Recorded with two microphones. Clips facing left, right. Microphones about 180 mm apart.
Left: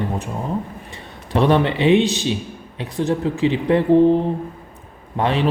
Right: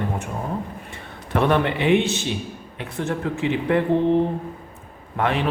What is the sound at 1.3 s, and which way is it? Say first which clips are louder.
Speech: left 3 dB; 20° left (ahead or behind).